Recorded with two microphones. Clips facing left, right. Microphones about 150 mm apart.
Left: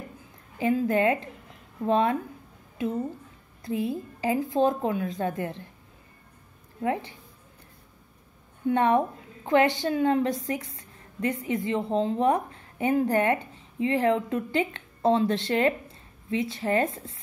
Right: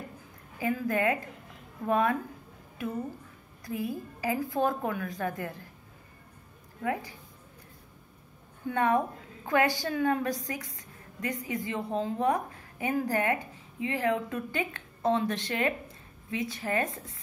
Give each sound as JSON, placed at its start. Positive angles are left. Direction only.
{"t": 0.6, "sound": "a woman's voice", "side_deg": 25}
{"t": 3.6, "sound": "a woman's voice", "side_deg": 25}
{"t": 6.8, "sound": "a woman's voice", "side_deg": 25}
{"t": 8.6, "sound": "a woman's voice", "side_deg": 25}